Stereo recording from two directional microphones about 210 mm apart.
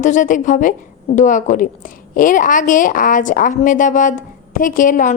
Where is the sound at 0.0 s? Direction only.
35° left (ahead or behind).